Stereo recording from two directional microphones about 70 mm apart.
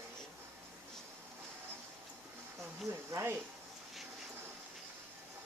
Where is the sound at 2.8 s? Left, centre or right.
Right.